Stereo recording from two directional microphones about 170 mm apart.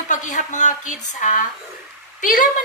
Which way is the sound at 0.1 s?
45° left (ahead or behind).